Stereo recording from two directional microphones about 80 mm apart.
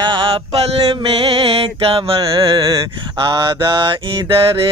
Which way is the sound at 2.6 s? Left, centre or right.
Right.